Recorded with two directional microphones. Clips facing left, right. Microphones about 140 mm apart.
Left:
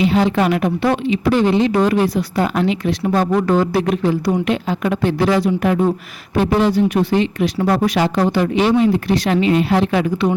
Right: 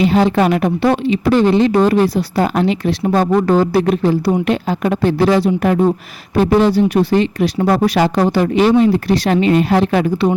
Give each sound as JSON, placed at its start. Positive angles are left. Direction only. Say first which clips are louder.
{"t": 0.0, "sound": "a woman's voice", "louder": "right 2 dB", "side_deg": -40}